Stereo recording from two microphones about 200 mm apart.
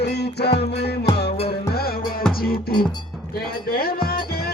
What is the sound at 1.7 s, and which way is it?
Music, 50° left (ahead or behind).